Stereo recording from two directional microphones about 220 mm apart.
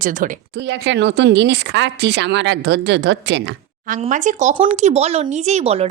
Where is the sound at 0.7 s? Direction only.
55° right (ahead or behind).